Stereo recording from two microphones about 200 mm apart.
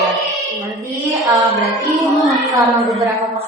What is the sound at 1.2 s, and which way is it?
Speech, 15° right (ahead or behind).